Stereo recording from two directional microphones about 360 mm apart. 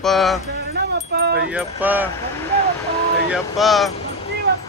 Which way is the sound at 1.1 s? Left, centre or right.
Right.